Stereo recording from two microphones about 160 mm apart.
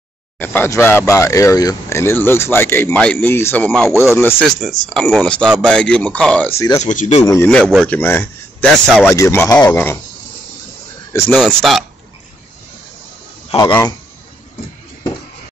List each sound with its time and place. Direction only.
0.4 s speech: 15° left (ahead or behind)
6.8 s speech: 50° left (ahead or behind)
7.4 s speech: 5° left (ahead or behind)
11.3 s speech: centre (ahead or behind)
13.6 s speech: 25° left (ahead or behind)